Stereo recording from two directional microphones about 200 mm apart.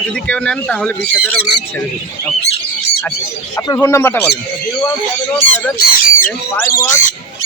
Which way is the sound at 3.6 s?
15° left (ahead or behind).